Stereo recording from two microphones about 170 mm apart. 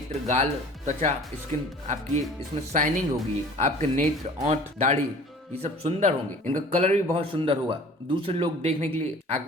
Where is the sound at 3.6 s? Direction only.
45° right (ahead or behind).